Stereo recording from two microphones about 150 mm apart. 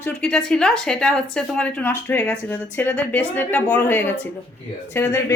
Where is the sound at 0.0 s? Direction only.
5° left (ahead or behind).